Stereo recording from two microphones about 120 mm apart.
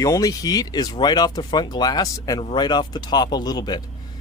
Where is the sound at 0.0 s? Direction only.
30° left (ahead or behind).